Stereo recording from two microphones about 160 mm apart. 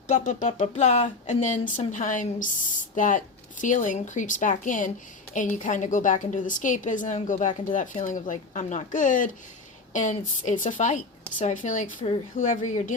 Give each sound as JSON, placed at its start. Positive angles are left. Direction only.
{"t": 0.1, "sound": "speech", "side_deg": 50}